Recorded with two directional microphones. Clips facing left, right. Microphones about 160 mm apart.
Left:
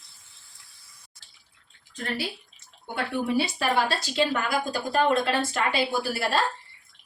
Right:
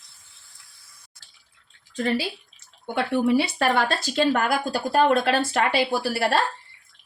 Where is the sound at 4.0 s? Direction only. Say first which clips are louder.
Right 4 dB; 50° right (ahead or behind).